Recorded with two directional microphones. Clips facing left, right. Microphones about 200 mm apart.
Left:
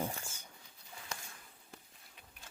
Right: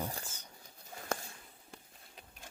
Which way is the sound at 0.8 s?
45° right (ahead or behind).